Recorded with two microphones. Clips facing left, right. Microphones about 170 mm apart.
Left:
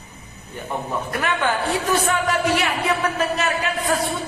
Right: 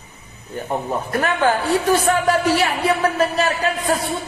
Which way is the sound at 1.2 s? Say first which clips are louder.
Right 4 dB; 40° right (ahead or behind).